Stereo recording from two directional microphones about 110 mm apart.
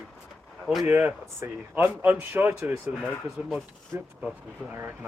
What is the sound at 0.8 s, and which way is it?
Speech, 20° right (ahead or behind).